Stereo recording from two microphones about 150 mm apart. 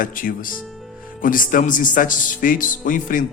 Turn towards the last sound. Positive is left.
turn(degrees=60)  # may be behind; listen again after turning